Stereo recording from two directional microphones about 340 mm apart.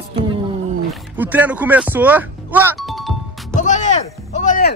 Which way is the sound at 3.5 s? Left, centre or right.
Left.